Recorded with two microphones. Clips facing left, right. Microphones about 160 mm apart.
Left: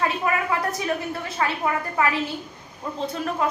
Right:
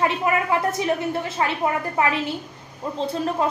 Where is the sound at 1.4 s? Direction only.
25° right (ahead or behind).